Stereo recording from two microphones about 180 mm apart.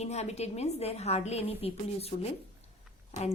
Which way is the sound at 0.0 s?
35° left (ahead or behind).